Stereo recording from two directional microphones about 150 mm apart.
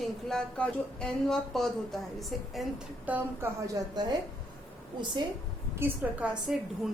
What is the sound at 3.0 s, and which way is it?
Speech, 10° right (ahead or behind).